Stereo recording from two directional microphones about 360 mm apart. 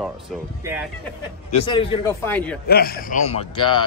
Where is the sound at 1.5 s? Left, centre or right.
Centre.